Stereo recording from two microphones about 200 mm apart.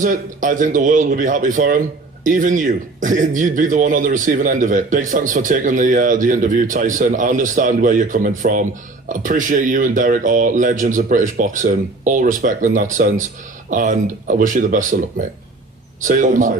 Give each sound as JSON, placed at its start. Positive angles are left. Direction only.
{"t": 0.0, "sound": "a man's voice", "side_deg": -40}